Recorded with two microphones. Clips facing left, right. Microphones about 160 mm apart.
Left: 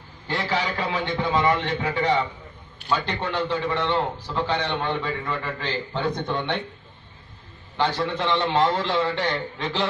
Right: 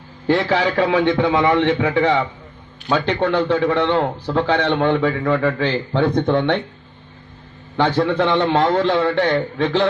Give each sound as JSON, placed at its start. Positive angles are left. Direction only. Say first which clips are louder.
{"t": 0.3, "sound": "a man's voice", "louder": "right 9 dB", "side_deg": -65}
{"t": 7.7, "sound": "a man's voice", "louder": "right 7 dB", "side_deg": -55}